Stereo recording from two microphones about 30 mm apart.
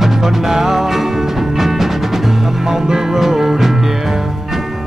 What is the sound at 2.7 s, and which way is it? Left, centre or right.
Music, centre.